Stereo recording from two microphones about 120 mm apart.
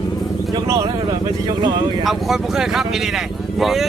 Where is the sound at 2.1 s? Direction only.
Centre (ahead or behind).